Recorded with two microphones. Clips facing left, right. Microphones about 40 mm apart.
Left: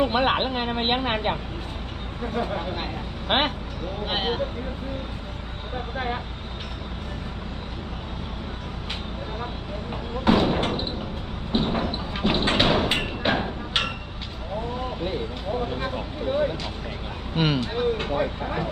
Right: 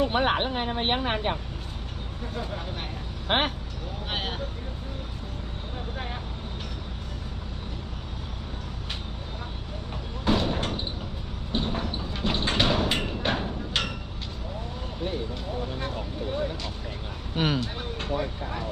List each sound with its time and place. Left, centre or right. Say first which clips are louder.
0.0 s speech: left 2 dB; left
5.7 s speech: left 8 dB; left
10.2 s speech: left 5 dB; left
11.5 s a sound: left 5 dB; left
14.8 s vehicle: left 4 dB; left
17.6 s speech: left 8 dB; left